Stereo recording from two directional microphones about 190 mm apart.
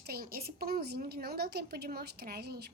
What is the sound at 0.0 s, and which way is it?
A woman's voice, 55° right (ahead or behind).